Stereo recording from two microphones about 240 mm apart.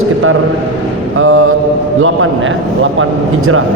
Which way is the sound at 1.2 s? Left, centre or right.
Right.